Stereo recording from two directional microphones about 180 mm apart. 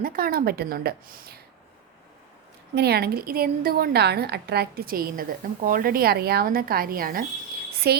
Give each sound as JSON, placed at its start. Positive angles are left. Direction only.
{"t": 0.0, "sound": "a woman's voice", "side_deg": -55}
{"t": 2.7, "sound": "a woman's voice", "side_deg": -65}